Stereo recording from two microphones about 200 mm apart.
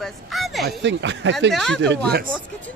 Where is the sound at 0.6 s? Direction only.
65° right (ahead or behind).